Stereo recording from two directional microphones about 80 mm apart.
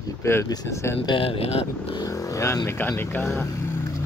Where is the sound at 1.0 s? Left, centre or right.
Left.